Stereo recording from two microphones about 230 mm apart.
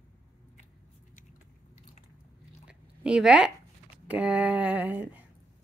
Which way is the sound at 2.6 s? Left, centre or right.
Centre.